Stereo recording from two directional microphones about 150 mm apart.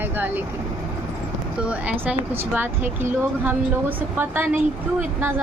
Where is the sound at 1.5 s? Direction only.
10° right (ahead or behind).